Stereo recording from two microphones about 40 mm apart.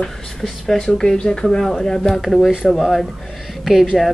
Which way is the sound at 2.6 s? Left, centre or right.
Centre.